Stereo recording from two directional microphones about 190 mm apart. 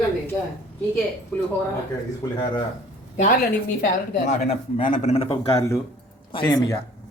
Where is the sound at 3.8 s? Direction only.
40° left (ahead or behind).